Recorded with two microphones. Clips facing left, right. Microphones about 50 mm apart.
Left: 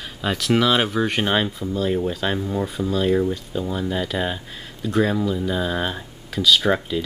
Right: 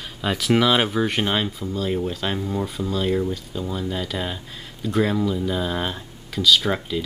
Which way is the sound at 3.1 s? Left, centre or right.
Centre.